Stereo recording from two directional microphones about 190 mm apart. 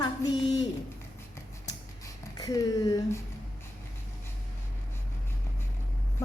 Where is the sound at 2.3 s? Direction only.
20° left (ahead or behind).